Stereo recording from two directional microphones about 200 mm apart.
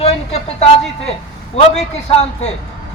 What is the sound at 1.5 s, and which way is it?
Speech, 35° left (ahead or behind).